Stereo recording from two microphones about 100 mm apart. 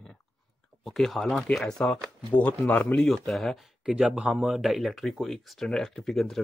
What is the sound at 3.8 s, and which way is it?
Speech, 10° right (ahead or behind).